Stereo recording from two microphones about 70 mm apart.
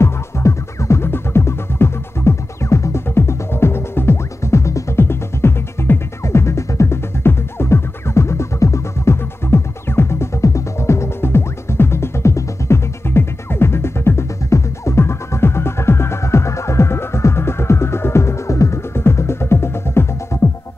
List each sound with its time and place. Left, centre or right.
0.0 s music: left